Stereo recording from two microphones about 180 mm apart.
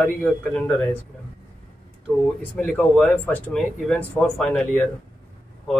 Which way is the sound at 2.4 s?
5° left (ahead or behind).